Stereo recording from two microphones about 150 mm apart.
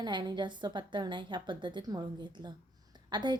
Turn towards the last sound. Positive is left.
turn(degrees=-30)  # may be behind; listen again after turning